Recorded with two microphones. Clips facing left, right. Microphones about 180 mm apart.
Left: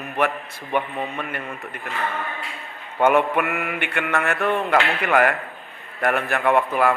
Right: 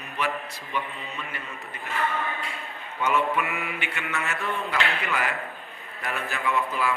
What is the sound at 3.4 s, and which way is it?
Speech, 65° left (ahead or behind).